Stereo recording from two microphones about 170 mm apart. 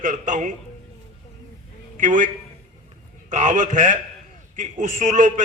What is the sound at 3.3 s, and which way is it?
A man's voice, 45° right (ahead or behind).